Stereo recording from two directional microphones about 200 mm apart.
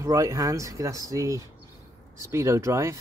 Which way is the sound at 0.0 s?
15° right (ahead or behind).